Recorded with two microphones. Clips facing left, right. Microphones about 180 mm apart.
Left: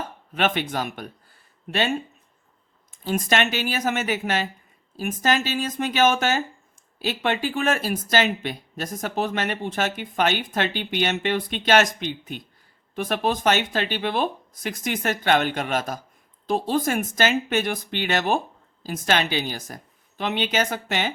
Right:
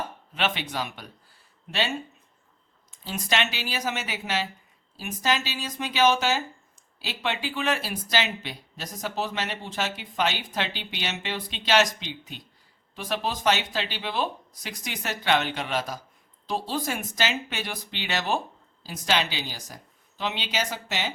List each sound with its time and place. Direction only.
0.3 s speech: 50° left (ahead or behind)
2.9 s speech: 50° left (ahead or behind)